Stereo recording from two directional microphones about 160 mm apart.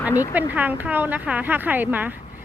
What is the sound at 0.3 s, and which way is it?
Speech, 10° right (ahead or behind).